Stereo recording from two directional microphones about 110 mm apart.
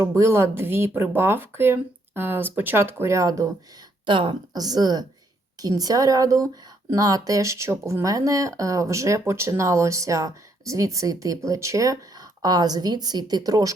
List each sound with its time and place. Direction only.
0.0 s speech: 30° right (ahead or behind)
4.0 s a woman's voice: 50° right (ahead or behind)
4.5 s speech: 35° right (ahead or behind)